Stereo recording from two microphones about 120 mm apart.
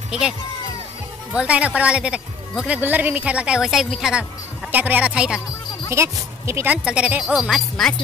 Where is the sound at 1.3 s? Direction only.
10° right (ahead or behind).